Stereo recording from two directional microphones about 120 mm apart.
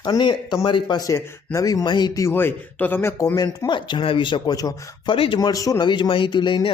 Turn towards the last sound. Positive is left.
turn(degrees=40)  # may be behind; listen again after turning